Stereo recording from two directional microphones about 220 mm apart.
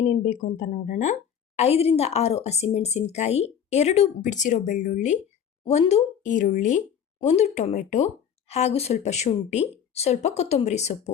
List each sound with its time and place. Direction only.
0.1 s a woman's voice: 40° left (ahead or behind)